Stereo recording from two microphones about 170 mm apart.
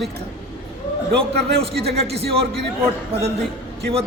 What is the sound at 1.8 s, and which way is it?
Speech, 35° right (ahead or behind).